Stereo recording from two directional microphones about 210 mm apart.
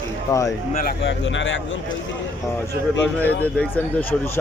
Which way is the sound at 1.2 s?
60° left (ahead or behind).